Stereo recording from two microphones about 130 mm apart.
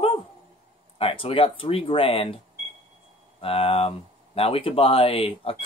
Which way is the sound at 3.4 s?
45° left (ahead or behind).